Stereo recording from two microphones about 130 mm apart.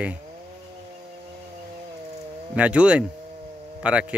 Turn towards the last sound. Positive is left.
turn(degrees=-10)  # may be behind; listen again after turning